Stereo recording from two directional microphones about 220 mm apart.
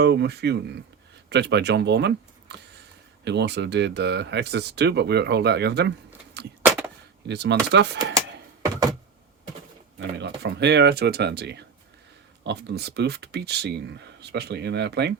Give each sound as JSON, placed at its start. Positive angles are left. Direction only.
{"t": 0.0, "sound": "speech", "side_deg": -50}
{"t": 6.6, "sound": "a sound", "side_deg": -10}
{"t": 7.3, "sound": "speech", "side_deg": -50}
{"t": 10.0, "sound": "speech", "side_deg": -50}